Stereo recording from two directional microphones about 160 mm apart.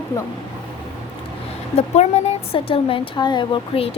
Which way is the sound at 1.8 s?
40° left (ahead or behind).